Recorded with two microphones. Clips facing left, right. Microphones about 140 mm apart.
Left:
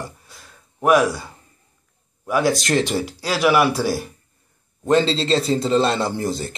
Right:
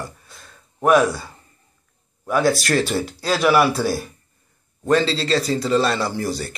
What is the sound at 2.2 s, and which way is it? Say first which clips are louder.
Speech: right 1 dB; 10° left (ahead or behind).